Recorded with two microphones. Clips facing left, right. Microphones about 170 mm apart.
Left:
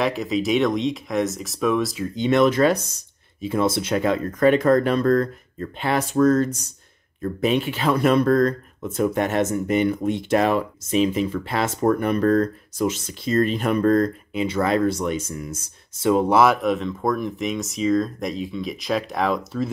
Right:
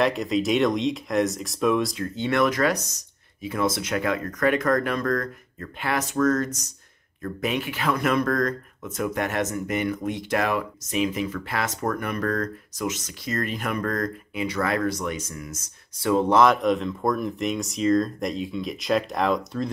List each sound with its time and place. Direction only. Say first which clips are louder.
0.0 s speech: even; centre (ahead or behind)
2.1 s speech: left 5 dB; 20° left (ahead or behind)
16.1 s speech: left 2 dB; 10° left (ahead or behind)